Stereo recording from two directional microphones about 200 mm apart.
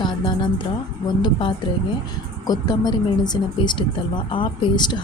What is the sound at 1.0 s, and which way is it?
Speech, 25° left (ahead or behind).